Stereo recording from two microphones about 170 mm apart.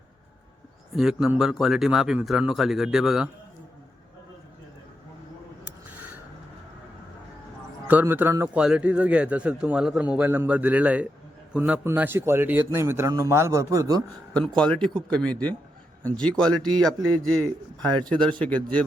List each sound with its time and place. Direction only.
0.9 s a man's voice: 5° right (ahead or behind)
7.9 s a man's voice: 10° right (ahead or behind)
14.3 s a man's voice: 5° left (ahead or behind)